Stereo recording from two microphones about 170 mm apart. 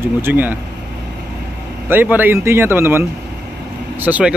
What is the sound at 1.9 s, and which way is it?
Speech, 10° right (ahead or behind).